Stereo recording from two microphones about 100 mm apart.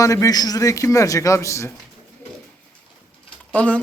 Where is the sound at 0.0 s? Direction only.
35° left (ahead or behind).